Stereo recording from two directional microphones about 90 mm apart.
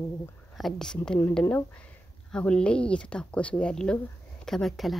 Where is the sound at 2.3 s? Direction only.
10° left (ahead or behind).